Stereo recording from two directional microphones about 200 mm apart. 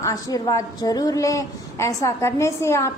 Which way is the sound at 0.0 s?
15° left (ahead or behind).